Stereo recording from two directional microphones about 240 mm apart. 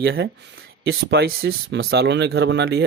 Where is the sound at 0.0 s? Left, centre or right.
Right.